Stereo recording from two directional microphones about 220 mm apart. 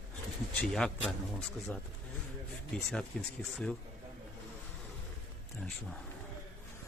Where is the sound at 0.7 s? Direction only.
5° left (ahead or behind).